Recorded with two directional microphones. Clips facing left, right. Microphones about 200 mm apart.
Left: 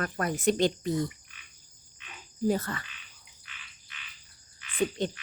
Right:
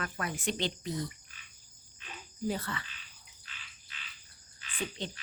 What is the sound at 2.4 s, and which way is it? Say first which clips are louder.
Speech: left 7 dB; 45° left (ahead or behind).